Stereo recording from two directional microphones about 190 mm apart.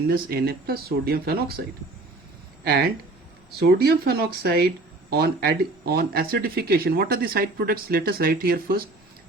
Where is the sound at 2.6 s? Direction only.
55° right (ahead or behind).